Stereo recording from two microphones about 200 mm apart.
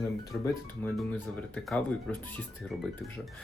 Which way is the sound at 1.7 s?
5° left (ahead or behind).